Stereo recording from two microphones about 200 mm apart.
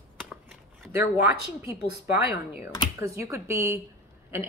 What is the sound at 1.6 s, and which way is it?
Speech, 15° right (ahead or behind).